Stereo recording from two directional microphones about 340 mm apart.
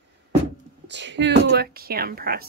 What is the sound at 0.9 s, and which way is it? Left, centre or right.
Speech, right.